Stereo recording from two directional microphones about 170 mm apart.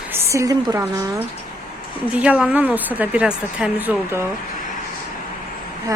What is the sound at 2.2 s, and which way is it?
A woman's voice, 5° right (ahead or behind).